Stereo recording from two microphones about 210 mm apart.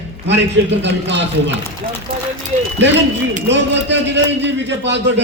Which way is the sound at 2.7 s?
55° right (ahead or behind).